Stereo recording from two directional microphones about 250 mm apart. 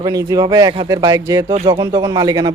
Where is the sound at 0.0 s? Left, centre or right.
Centre.